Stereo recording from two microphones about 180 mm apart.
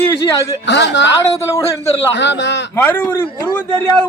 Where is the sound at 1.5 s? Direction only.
15° left (ahead or behind).